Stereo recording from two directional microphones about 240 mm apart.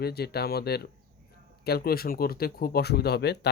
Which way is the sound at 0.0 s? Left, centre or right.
Left.